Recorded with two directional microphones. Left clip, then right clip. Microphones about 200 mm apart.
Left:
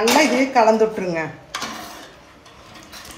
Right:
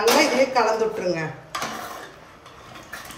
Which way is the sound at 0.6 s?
35° left (ahead or behind).